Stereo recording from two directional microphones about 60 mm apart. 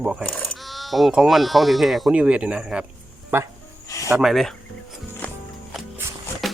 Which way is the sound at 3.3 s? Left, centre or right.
Right.